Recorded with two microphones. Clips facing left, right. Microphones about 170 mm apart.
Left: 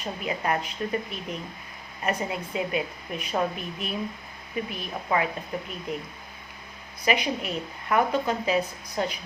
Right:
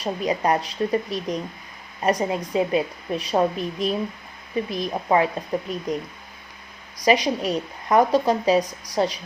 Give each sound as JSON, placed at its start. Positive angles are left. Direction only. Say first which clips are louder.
{"t": 0.0, "sound": "a woman's voice", "louder": "right 7 dB", "side_deg": -35}
{"t": 7.0, "sound": "a woman's voice", "louder": "right 6 dB", "side_deg": -35}